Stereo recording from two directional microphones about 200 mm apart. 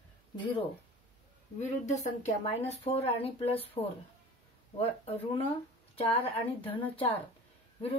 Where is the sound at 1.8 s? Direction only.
35° left (ahead or behind).